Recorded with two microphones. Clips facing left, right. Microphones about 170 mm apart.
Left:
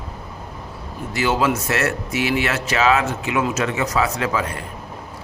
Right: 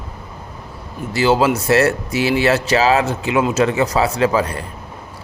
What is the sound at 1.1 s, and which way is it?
Speech, 30° right (ahead or behind).